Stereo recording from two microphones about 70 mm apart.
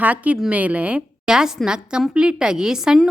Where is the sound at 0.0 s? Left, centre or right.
Right.